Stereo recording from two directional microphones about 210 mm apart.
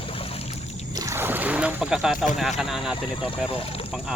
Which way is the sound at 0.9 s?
15° right (ahead or behind).